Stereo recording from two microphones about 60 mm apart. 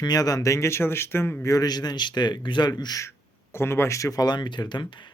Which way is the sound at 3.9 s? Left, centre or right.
Left.